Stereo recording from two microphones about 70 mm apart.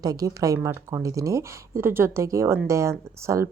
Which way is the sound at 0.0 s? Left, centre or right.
Right.